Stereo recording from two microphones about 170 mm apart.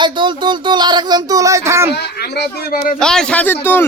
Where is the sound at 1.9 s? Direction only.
70° left (ahead or behind).